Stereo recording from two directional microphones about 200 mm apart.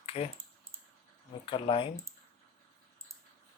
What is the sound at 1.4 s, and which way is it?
Speech, 25° left (ahead or behind).